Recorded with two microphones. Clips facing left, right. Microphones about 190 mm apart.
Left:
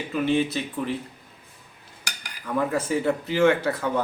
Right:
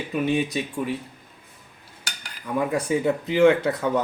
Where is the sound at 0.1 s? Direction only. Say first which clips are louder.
Left 1 dB; 15° right (ahead or behind).